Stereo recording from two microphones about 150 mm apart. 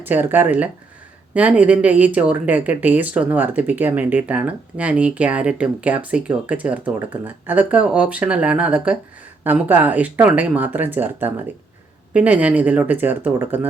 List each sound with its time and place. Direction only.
0.0 s speech: 10° right (ahead or behind)